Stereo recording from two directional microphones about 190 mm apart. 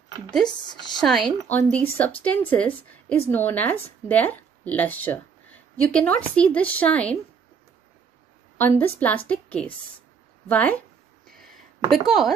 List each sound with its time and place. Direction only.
0.5 s speech: 20° left (ahead or behind)
1.0 s a woman's voice: centre (ahead or behind)
8.5 s a woman's voice: 10° left (ahead or behind)
11.2 s a sound: centre (ahead or behind)
11.9 s speech: centre (ahead or behind)